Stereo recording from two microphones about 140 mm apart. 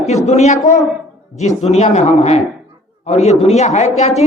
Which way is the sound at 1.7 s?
55° left (ahead or behind).